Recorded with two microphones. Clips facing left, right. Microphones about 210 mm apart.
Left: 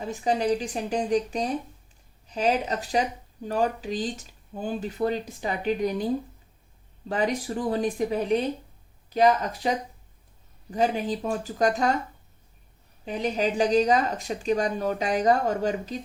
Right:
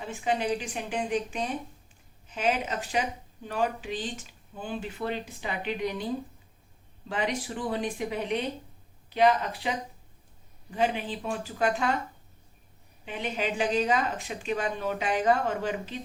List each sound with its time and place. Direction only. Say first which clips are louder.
0.0 s speech: left 4 dB; 40° left (ahead or behind)
7.1 s speech: left 4 dB; 40° left (ahead or behind)
13.1 s speech: left 5 dB; 40° left (ahead or behind)